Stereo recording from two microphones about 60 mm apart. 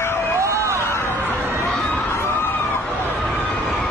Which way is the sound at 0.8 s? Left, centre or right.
Left.